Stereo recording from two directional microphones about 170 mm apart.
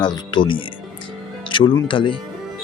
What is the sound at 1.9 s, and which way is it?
Speech, 30° left (ahead or behind).